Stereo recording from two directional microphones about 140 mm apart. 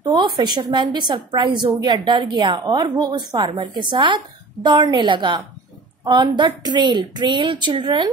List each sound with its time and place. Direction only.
0.0 s a woman's voice: 30° right (ahead or behind)